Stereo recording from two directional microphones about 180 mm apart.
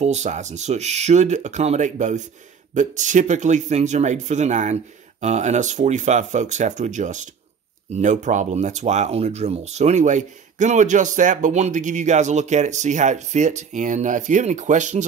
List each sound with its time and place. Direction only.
0.0 s speech: 40° right (ahead or behind)